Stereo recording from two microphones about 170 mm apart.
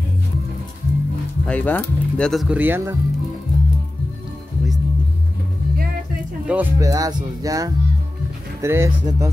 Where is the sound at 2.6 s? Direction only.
15° right (ahead or behind).